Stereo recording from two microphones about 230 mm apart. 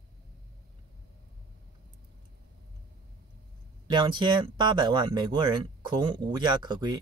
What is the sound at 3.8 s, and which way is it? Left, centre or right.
Speech, centre.